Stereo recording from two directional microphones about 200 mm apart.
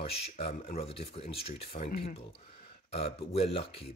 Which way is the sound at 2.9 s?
30° left (ahead or behind).